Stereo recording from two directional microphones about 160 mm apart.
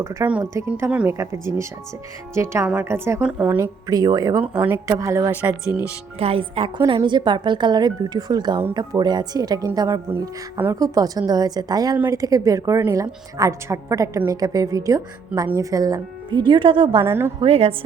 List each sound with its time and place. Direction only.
0.0 s speech: 15° right (ahead or behind)
3.6 s a woman's voice: 25° right (ahead or behind)
4.5 s a woman's voice: 10° right (ahead or behind)
6.1 s a woman's voice: 35° right (ahead or behind)
17.0 s speech: 15° right (ahead or behind)
17.4 s a woman's voice: 35° right (ahead or behind)